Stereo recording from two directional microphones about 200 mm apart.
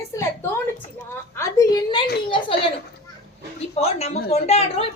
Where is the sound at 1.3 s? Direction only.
15° left (ahead or behind).